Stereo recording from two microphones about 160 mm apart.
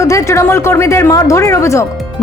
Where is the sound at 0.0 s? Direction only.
20° left (ahead or behind).